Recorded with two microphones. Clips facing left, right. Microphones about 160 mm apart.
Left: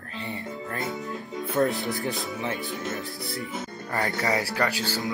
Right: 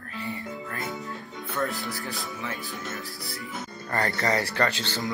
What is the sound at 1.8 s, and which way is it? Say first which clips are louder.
Speech: left 5 dB; 20° left (ahead or behind).